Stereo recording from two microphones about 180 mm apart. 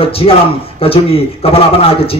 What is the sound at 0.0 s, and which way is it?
A man's voice, 30° left (ahead or behind).